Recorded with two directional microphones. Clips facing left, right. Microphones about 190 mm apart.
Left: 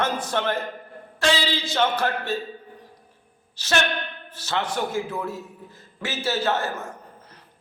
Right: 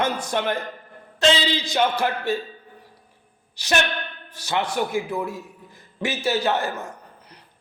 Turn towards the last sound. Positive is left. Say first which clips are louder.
# right 2 dB
turn(degrees=-15)  # may be behind; listen again after turning